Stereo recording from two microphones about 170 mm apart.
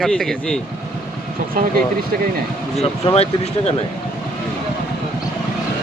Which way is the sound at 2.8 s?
35° left (ahead or behind).